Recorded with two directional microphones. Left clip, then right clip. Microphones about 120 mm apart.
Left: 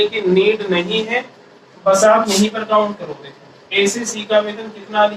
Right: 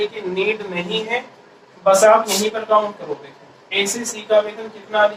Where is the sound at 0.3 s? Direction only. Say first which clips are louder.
Left 7 dB; 40° left (ahead or behind).